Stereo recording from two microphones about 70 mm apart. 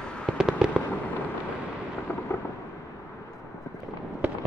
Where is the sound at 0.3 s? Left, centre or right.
Centre.